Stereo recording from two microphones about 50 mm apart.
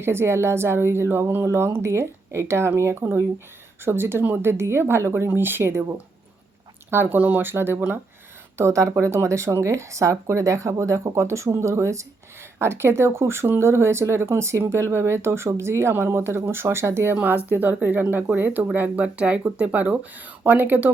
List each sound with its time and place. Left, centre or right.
0.0 s speech: right
5.3 s speech: right
6.9 s speech: right
7.5 s speech: right
8.5 s speech: right
11.4 s speech: right
12.5 s speech: right
17.2 s speech: right